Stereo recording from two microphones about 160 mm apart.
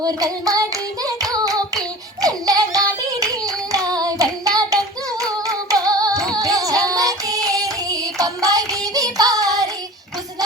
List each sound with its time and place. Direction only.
0.0 s hands: 25° right (ahead or behind)
3.8 s child singing: 25° right (ahead or behind)
5.2 s singing: 20° right (ahead or behind)